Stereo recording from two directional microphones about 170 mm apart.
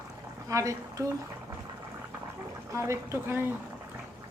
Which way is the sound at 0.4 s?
20° right (ahead or behind).